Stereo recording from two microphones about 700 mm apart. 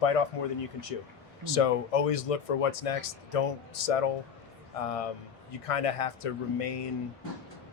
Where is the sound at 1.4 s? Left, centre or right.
Left.